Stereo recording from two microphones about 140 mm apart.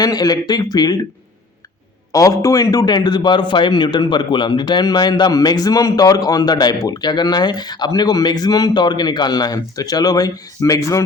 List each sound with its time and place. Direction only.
0.0 s speech: 25° left (ahead or behind)
2.1 s a man's voice: 25° left (ahead or behind)